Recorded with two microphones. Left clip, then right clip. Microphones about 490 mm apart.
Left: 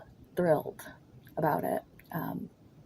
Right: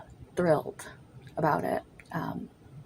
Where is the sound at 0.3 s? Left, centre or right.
Left.